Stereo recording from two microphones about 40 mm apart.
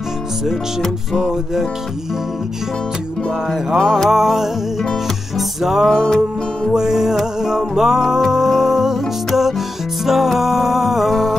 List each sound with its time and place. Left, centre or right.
0.8 s music: centre
1.3 s music: centre
3.8 s music: centre
4.1 s music: centre
6.0 s music: centre
6.7 s music: centre